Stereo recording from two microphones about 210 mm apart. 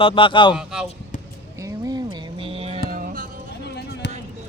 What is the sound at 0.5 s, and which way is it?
Speech, centre (ahead or behind).